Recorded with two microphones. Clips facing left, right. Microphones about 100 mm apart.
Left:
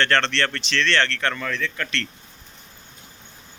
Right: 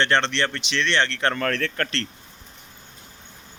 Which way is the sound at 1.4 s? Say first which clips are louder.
Right 3 dB; 60° right (ahead or behind).